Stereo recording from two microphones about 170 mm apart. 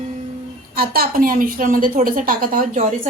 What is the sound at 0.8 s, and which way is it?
A woman's voice, 60° right (ahead or behind).